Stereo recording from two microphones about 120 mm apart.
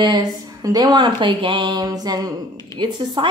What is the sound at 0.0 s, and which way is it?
A woman's voice, 35° right (ahead or behind).